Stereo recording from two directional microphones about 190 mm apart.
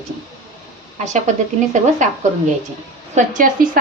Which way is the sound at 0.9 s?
40° right (ahead or behind).